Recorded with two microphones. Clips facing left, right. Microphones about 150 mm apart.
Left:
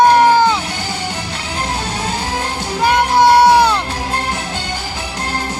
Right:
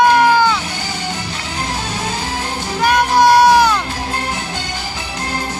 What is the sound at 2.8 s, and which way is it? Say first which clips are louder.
Music: even; 25° left (ahead or behind).